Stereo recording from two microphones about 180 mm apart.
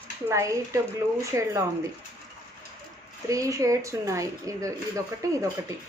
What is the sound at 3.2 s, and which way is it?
Speech, 15° right (ahead or behind).